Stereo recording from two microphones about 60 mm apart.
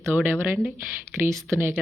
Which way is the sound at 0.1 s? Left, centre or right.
Right.